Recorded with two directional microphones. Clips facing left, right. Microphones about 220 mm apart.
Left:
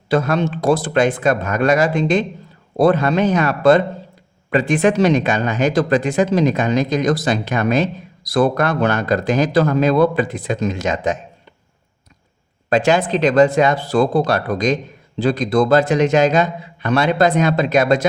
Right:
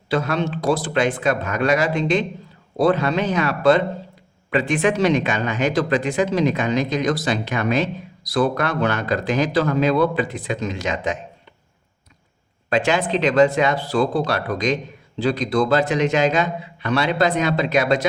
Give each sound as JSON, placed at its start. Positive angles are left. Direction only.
{"t": 0.1, "sound": "speech", "side_deg": 45}
{"t": 12.7, "sound": "speech", "side_deg": 40}